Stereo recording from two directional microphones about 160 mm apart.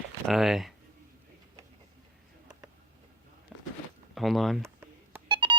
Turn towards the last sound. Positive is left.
turn(degrees=-30)  # may be behind; listen again after turning